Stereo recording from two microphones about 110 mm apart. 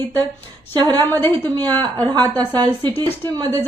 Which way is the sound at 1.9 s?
40° right (ahead or behind).